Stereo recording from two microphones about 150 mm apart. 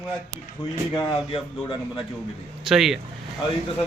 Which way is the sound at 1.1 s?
35° left (ahead or behind).